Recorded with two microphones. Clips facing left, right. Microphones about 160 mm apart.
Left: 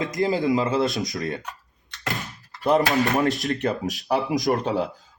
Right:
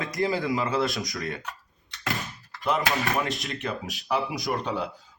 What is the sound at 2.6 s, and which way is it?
Speech, 40° left (ahead or behind).